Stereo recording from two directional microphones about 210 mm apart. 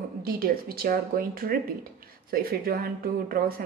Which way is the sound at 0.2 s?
45° right (ahead or behind).